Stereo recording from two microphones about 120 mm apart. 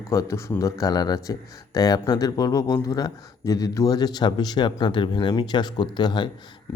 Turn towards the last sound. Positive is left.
turn(degrees=40)  # may be behind; listen again after turning